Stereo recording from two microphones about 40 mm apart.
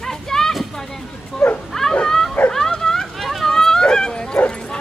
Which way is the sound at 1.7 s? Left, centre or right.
Centre.